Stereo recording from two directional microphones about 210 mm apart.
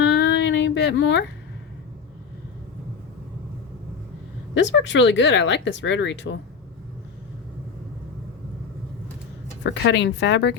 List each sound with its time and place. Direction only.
0.0 s a sound: 55° left (ahead or behind)
4.5 s speech: 60° left (ahead or behind)
9.6 s speech: 55° left (ahead or behind)